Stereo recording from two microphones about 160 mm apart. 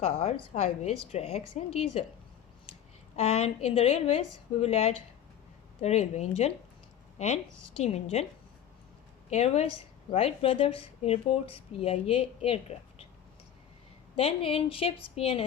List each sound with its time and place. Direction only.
0.2 s speech: 40° left (ahead or behind)
3.2 s speech: 40° left (ahead or behind)
7.8 s speech: 40° left (ahead or behind)
9.3 s speech: 40° left (ahead or behind)
14.2 s speech: 35° left (ahead or behind)